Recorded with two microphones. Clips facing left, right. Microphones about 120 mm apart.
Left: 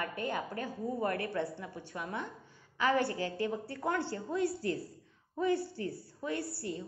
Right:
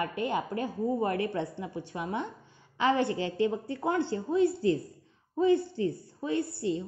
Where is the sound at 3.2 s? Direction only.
45° left (ahead or behind).